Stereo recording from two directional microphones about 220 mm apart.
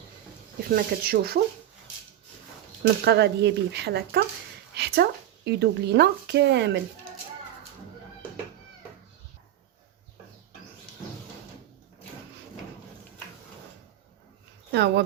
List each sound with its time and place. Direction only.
0.8 s speech: 40° right (ahead or behind)
2.8 s speech: 50° right (ahead or behind)
4.7 s a sound: 45° right (ahead or behind)
5.5 s speech: 50° right (ahead or behind)
14.7 s speech: 50° right (ahead or behind)